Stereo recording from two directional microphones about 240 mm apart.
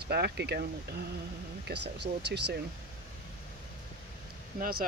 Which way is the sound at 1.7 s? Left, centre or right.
Right.